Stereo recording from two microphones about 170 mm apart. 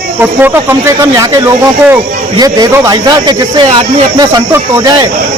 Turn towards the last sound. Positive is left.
turn(degrees=-20)  # may be behind; listen again after turning